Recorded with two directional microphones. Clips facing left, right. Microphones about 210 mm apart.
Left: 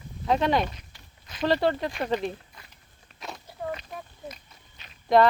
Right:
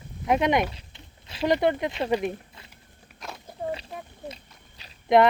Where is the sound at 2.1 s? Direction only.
10° right (ahead or behind).